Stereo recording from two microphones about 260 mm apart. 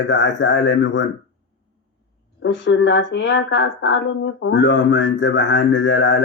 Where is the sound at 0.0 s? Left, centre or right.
Left.